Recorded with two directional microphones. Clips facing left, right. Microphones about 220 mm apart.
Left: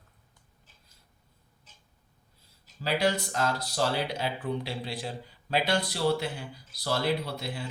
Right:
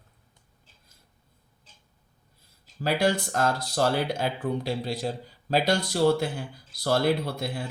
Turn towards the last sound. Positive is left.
turn(degrees=-50)  # may be behind; listen again after turning